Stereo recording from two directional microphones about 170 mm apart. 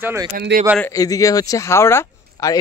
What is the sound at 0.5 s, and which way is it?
Speech, 75° right (ahead or behind).